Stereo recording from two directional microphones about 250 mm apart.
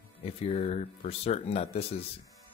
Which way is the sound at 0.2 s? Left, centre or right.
Left.